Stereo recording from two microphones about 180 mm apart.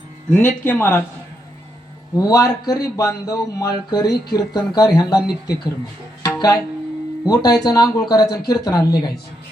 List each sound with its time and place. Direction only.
0.3 s speech: 10° left (ahead or behind)
2.1 s speech: 20° left (ahead or behind)
6.2 s music: 20° left (ahead or behind)
7.3 s speech: 20° left (ahead or behind)